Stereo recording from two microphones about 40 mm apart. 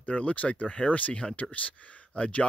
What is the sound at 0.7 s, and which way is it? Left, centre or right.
Speech, left.